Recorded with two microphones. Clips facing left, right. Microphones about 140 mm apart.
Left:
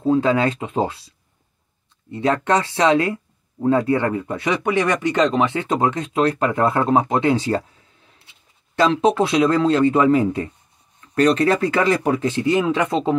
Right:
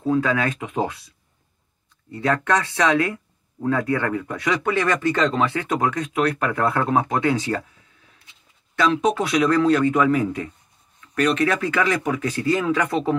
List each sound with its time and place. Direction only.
0.0 s speech: 25° left (ahead or behind)
8.7 s speech: 30° left (ahead or behind)